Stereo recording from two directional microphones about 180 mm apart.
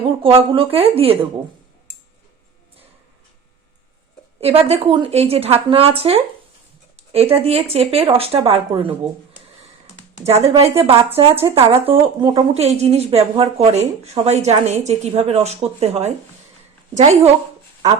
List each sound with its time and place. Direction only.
0.2 s a woman's voice: 30° right (ahead or behind)
4.4 s a woman's voice: 35° right (ahead or behind)
7.3 s a woman's voice: 35° right (ahead or behind)
10.2 s a woman's voice: 35° right (ahead or behind)
12.6 s a woman's voice: 35° right (ahead or behind)